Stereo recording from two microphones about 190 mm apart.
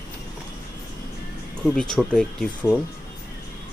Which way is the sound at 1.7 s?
5° left (ahead or behind).